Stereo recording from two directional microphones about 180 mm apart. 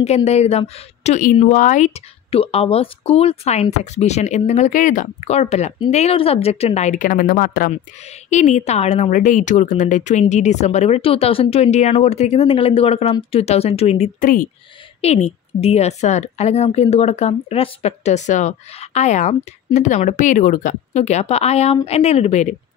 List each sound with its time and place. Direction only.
0.0 s a woman's voice: 35° left (ahead or behind); by 7.7 s 55° left (ahead or behind)
8.0 s a woman's voice: 40° left (ahead or behind)